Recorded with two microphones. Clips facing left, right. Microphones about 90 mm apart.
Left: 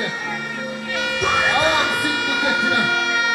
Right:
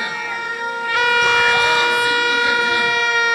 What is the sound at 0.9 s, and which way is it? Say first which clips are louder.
Music: right 6 dB; 65° right (ahead or behind).